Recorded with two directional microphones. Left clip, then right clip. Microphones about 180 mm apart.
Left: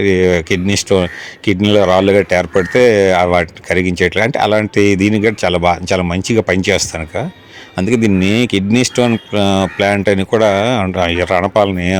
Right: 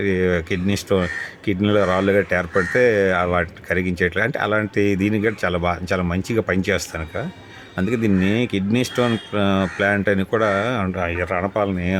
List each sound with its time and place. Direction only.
0.0 s speech: 25° left (ahead or behind)